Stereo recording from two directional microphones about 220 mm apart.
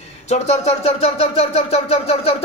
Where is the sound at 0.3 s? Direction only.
30° left (ahead or behind).